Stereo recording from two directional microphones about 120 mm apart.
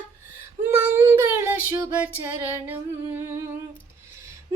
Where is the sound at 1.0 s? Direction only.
20° right (ahead or behind).